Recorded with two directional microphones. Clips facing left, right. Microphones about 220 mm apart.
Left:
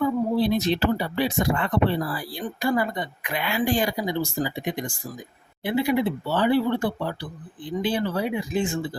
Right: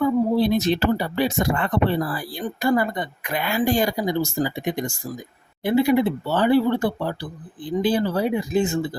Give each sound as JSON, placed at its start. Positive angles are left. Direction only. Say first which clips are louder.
{"t": 0.3, "sound": "speech", "louder": "right 2 dB", "side_deg": -45}